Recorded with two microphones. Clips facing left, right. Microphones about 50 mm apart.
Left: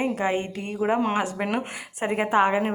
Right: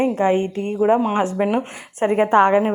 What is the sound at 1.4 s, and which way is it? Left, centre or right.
Speech, centre.